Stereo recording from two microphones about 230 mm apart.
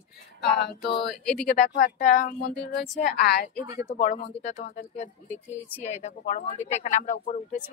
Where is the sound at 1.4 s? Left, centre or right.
Left.